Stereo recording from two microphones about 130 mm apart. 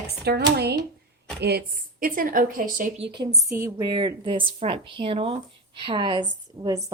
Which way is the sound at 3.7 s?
40° right (ahead or behind).